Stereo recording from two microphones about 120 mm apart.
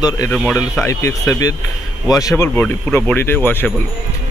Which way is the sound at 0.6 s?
25° left (ahead or behind).